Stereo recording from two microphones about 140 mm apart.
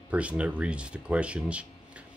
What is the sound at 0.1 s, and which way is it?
Speech, 10° right (ahead or behind).